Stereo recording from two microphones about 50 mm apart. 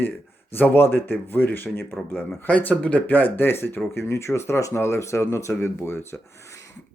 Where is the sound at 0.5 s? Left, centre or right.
Left.